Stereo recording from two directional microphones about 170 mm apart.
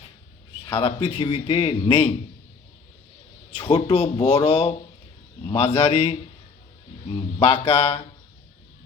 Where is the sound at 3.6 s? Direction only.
35° left (ahead or behind).